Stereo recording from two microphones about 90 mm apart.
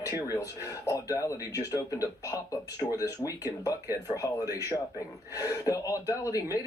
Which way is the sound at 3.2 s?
40° left (ahead or behind).